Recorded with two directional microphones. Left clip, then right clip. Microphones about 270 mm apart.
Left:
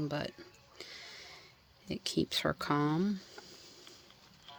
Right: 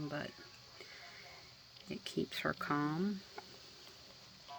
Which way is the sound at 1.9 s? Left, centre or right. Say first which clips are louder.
Left 7 dB; left.